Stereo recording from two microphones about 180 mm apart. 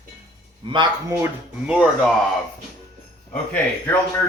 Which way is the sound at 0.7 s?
20° right (ahead or behind).